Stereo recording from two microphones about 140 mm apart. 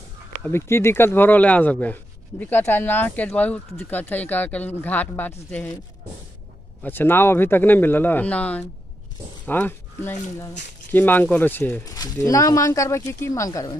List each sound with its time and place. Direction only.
0.4 s speech: 15° left (ahead or behind)
6.8 s speech: 15° left (ahead or behind)
11.8 s speech: 25° left (ahead or behind)